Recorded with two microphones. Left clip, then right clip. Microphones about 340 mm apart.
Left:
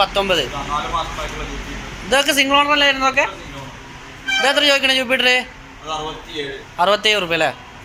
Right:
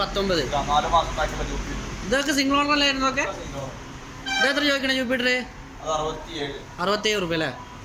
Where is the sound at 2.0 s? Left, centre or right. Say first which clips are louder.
Left 7 dB; centre.